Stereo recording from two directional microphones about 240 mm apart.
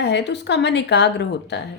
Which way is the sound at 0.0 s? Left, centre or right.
Left.